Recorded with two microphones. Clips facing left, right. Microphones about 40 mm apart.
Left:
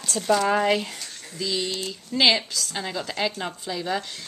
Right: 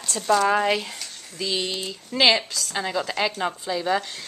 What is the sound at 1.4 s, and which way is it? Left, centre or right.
Speech, right.